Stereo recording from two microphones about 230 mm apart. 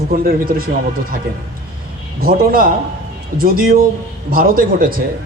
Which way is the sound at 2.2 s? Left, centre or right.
Right.